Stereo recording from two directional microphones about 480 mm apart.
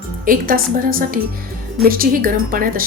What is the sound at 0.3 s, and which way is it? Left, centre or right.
A woman's voice, centre.